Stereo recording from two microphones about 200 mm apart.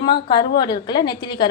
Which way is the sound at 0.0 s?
20° left (ahead or behind).